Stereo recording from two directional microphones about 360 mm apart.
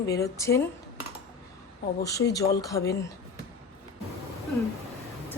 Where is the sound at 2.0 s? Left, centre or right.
Centre.